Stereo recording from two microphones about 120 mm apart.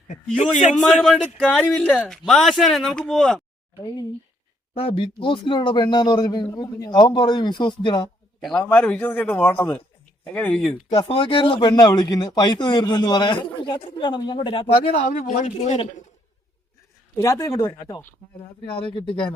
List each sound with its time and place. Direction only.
0.8 s a man's voice: 5° left (ahead or behind)
4.7 s speech: 55° left (ahead or behind)
8.4 s a man's voice: 5° left (ahead or behind)
10.6 s a man's voice: centre (ahead or behind)
10.9 s speech: 50° left (ahead or behind)
14.9 s speech: 90° left; by 16.0 s 75° left (ahead or behind)
17.2 s speech: 25° left (ahead or behind)
18.6 s speech: 45° left (ahead or behind)